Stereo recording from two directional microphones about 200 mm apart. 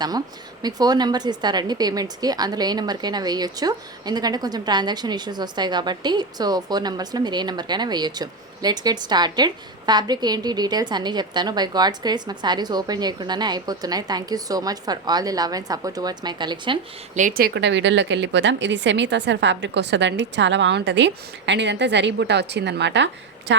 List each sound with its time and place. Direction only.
0.6 s speech: 20° right (ahead or behind)
17.2 s a woman's voice: 45° right (ahead or behind); by 23.0 s 60° right (ahead or behind)